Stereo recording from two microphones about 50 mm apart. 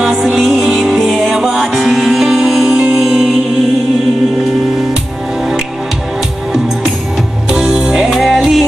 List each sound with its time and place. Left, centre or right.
0.0 s music: centre
7.5 s music: centre